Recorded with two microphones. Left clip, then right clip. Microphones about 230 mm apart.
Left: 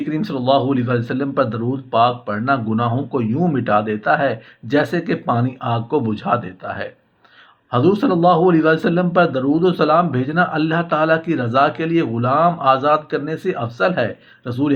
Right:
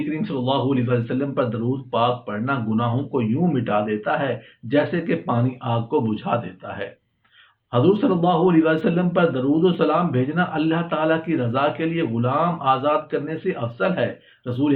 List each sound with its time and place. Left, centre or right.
0.3 s a man's voice: left